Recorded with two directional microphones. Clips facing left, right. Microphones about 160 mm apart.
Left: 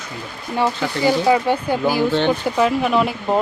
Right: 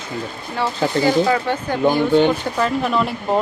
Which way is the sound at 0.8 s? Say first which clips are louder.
Right 4 dB; 30° right (ahead or behind).